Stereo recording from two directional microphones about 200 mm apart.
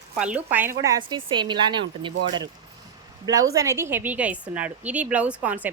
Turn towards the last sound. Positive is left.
turn(degrees=-5)  # may be behind; listen again after turning